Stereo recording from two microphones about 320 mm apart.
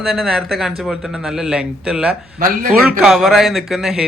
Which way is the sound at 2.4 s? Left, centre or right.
Right.